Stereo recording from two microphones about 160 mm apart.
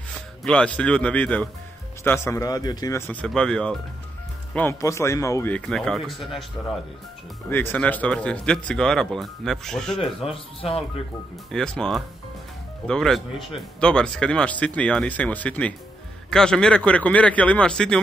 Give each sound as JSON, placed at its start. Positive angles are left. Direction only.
{"t": 0.4, "sound": "speech", "side_deg": 5}
{"t": 3.1, "sound": "speech", "side_deg": 5}
{"t": 4.6, "sound": "speech", "side_deg": 15}
{"t": 5.5, "sound": "speech", "side_deg": 5}
{"t": 7.4, "sound": "speech", "side_deg": 10}
{"t": 10.2, "sound": "speech", "side_deg": 35}
{"t": 11.5, "sound": "speech", "side_deg": 5}